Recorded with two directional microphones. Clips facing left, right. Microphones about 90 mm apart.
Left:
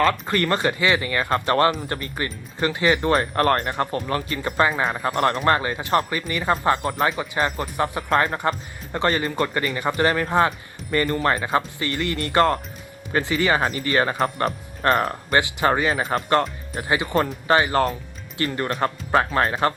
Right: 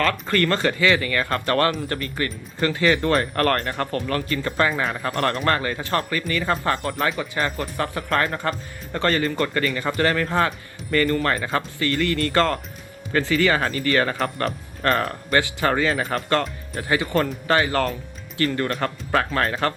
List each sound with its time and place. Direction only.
0.0 s speech: 20° left (ahead or behind)